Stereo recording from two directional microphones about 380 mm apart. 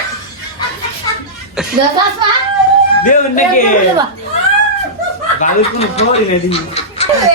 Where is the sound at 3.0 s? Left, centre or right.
Left.